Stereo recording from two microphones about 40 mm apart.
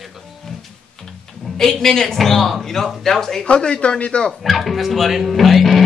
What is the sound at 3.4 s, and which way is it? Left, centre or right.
Speech, left.